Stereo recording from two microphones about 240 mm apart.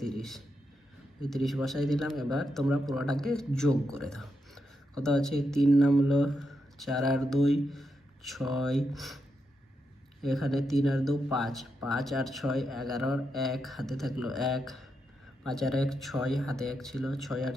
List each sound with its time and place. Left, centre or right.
0.0 s a sound: centre
1.2 s a man's voice: centre
10.2 s a man's voice: centre